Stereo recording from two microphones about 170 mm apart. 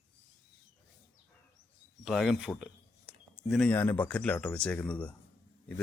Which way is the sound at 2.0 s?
Centre (ahead or behind).